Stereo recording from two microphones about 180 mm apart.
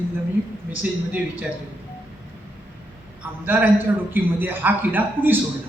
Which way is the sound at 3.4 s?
10° right (ahead or behind).